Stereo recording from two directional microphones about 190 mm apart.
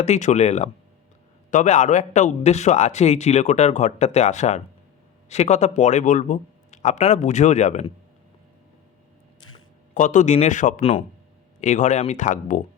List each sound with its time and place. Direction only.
0.0 s a man's voice: 35° left (ahead or behind)
9.9 s a man's voice: 40° left (ahead or behind)